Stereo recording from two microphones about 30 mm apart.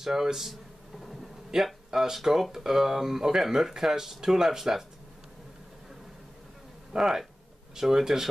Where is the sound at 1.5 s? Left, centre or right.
Right.